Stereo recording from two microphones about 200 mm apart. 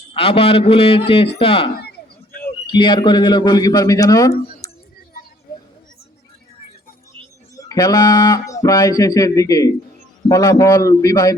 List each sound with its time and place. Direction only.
0.1 s a man's voice: 30° left (ahead or behind)
7.5 s speech: 20° left (ahead or behind)